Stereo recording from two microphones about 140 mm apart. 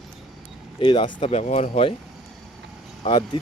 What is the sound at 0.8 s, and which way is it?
Speech, 35° left (ahead or behind).